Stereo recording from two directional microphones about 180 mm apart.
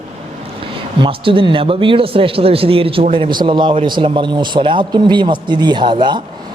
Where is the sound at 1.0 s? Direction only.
30° right (ahead or behind).